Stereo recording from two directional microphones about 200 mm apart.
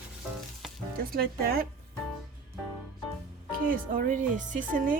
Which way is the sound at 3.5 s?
45° right (ahead or behind).